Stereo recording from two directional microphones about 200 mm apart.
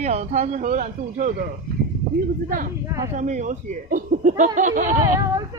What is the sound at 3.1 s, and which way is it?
Speech, 35° right (ahead or behind).